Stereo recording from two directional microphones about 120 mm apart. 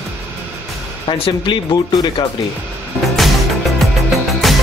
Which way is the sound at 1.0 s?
45° left (ahead or behind).